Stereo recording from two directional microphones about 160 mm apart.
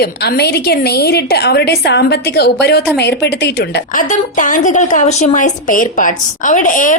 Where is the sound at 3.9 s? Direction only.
55° left (ahead or behind).